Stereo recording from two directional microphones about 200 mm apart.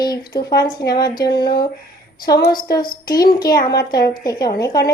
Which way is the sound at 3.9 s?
50° left (ahead or behind).